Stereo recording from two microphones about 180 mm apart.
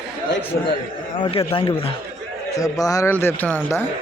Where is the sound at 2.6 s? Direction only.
20° left (ahead or behind).